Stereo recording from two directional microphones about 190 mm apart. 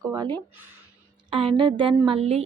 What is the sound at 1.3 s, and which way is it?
Speech, 30° right (ahead or behind).